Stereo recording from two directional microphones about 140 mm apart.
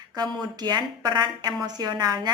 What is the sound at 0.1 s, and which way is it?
A woman's voice, 30° right (ahead or behind).